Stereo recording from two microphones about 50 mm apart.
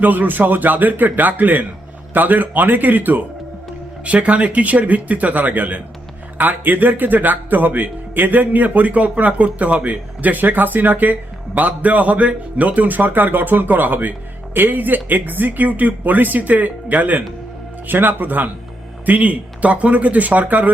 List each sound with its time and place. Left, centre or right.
0.0 s a man's voice: right
4.0 s a man's voice: right